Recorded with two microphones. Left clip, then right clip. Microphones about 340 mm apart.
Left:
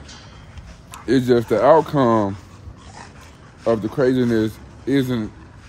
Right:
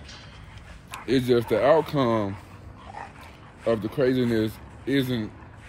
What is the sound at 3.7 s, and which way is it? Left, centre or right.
Speech, centre.